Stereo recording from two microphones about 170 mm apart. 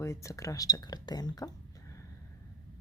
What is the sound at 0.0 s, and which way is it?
Speech, 15° left (ahead or behind).